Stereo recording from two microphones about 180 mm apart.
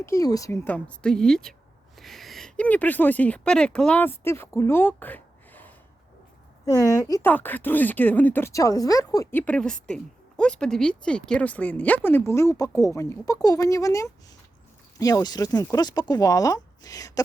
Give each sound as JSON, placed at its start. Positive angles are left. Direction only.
{"t": 0.0, "sound": "speech", "side_deg": 15}